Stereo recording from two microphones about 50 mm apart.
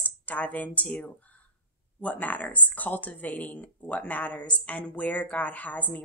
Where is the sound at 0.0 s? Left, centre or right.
Left.